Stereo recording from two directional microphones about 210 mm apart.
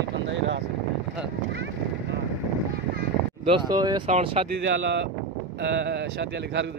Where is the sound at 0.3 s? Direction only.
60° right (ahead or behind).